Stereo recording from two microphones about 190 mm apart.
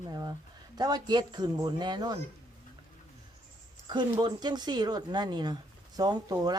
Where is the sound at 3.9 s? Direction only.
25° right (ahead or behind).